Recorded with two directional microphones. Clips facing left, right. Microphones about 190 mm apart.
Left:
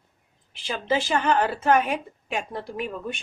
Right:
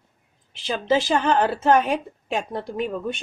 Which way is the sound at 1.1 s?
25° right (ahead or behind).